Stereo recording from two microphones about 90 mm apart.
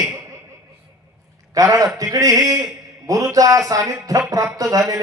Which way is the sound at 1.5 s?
40° right (ahead or behind).